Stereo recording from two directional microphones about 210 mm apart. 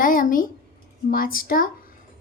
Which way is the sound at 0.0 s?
40° left (ahead or behind).